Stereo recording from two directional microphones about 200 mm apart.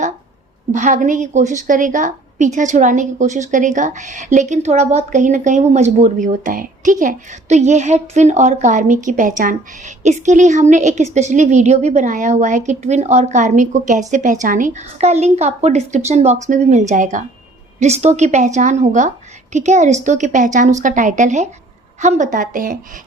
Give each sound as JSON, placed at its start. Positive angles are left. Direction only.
{"t": 0.7, "sound": "a woman's voice", "side_deg": -40}